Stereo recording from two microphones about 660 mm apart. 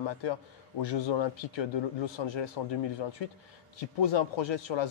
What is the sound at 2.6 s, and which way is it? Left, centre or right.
Speech, left.